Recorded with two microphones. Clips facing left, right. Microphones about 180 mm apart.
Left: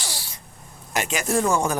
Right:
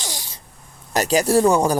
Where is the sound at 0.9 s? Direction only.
35° right (ahead or behind).